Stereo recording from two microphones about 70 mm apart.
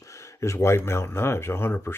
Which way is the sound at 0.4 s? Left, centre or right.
Left.